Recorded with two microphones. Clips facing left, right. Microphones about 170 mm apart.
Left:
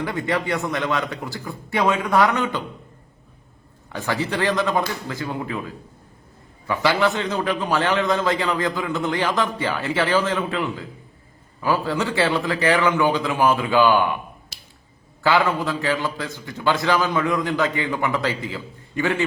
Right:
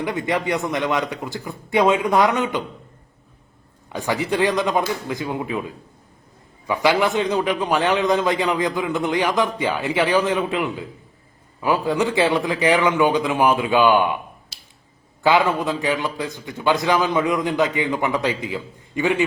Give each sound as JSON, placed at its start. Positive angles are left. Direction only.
{"t": 0.0, "sound": "a man's voice", "side_deg": -20}
{"t": 3.8, "sound": "a man's voice", "side_deg": -15}
{"t": 14.5, "sound": "clicking", "side_deg": 55}
{"t": 15.2, "sound": "a man's voice", "side_deg": -20}